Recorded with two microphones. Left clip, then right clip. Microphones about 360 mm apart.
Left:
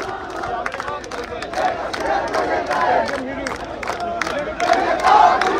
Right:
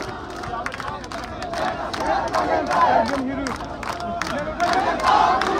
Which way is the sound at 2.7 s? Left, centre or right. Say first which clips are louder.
Right 2 dB; centre.